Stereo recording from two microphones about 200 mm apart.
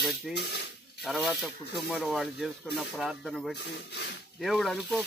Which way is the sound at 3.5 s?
55° left (ahead or behind).